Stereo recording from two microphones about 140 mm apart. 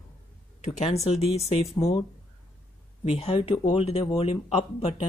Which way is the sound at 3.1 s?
45° left (ahead or behind).